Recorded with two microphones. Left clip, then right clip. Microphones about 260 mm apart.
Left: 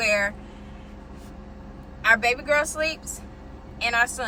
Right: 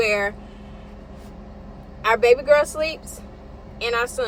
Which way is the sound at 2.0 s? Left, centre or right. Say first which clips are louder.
Right 4 dB; centre.